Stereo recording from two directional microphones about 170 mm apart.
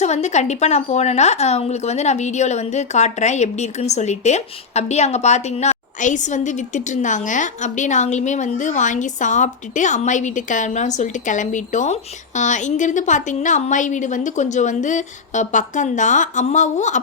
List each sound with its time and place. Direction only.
0.0 s a woman's voice: 40° left (ahead or behind)